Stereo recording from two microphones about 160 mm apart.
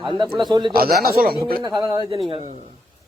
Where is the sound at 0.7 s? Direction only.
70° right (ahead or behind).